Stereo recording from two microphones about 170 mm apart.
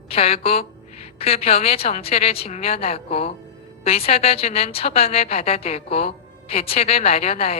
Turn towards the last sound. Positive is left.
turn(degrees=35)  # may be behind; listen again after turning